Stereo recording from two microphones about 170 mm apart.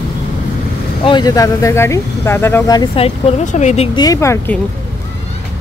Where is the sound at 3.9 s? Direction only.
20° left (ahead or behind).